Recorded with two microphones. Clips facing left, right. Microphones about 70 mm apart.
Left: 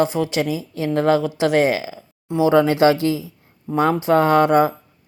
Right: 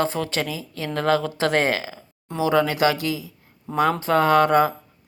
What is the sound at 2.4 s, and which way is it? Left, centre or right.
Speech, left.